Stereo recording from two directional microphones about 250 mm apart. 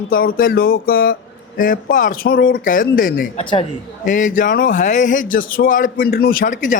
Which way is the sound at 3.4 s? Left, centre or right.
Centre.